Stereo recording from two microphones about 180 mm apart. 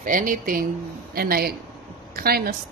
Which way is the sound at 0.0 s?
50° right (ahead or behind).